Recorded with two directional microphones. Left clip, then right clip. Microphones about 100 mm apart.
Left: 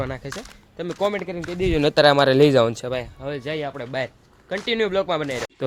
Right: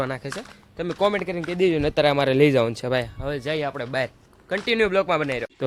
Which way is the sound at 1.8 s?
35° left (ahead or behind).